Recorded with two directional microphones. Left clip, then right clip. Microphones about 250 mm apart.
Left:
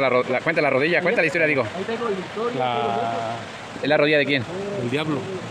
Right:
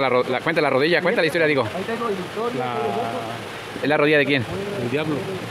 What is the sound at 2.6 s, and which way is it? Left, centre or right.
Speech, left.